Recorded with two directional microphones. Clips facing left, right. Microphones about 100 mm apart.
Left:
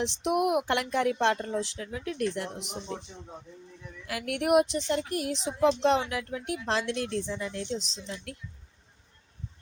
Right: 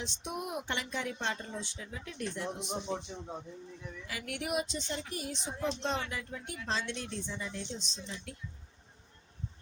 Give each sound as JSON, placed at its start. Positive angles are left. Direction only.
{"t": 0.0, "sound": "a woman's voice", "side_deg": 80}
{"t": 2.9, "sound": "a man's voice", "side_deg": -10}
{"t": 4.0, "sound": "a woman's voice", "side_deg": 65}